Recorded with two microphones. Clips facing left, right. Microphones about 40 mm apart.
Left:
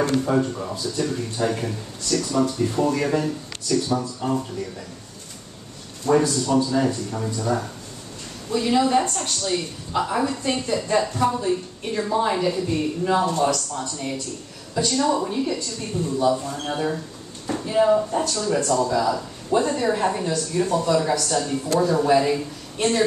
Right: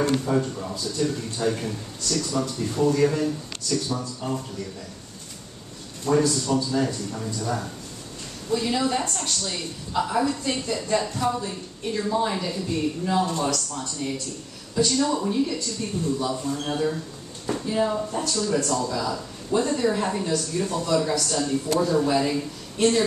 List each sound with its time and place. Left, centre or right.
0.2 s speech: centre
6.0 s a man's voice: centre